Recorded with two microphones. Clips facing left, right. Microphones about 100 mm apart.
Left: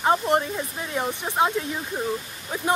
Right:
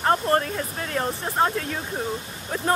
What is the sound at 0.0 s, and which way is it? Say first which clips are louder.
Speech: even; 10° left (ahead or behind).